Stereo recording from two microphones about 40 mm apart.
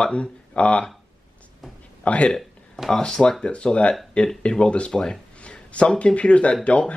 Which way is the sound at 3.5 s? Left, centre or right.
Left.